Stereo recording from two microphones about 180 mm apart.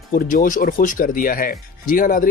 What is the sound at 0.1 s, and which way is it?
Speech, 55° left (ahead or behind).